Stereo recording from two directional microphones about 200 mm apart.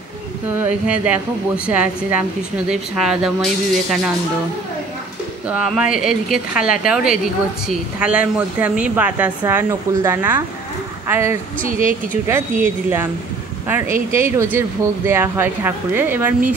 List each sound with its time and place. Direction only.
0.6 s speech: 5° right (ahead or behind)
5.5 s speech: 5° right (ahead or behind)
11.6 s a woman's voice: 45° right (ahead or behind)
13.7 s speech: 10° right (ahead or behind)